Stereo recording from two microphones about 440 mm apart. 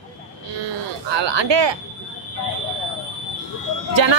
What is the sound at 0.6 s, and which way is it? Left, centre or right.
Speech, right.